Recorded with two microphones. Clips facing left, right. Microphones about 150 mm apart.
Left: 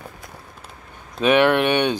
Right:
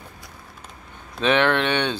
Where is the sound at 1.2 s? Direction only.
10° left (ahead or behind).